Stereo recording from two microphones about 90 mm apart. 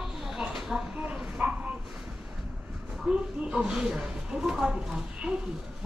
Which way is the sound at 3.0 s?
10° right (ahead or behind).